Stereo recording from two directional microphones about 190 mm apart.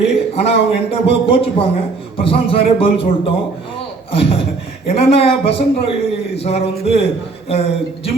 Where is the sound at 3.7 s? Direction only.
30° left (ahead or behind).